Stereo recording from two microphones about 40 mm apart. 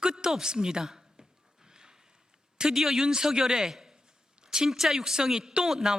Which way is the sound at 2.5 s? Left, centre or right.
Centre.